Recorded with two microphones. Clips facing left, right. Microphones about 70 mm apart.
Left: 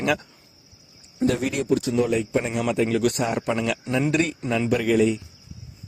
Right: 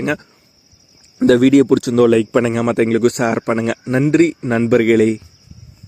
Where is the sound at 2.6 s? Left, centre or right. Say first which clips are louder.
Right 5 dB; right.